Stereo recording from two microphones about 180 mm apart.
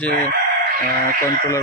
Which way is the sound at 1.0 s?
15° left (ahead or behind).